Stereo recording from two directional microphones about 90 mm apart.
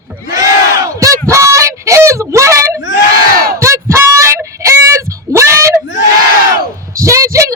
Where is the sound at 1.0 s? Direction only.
35° right (ahead or behind).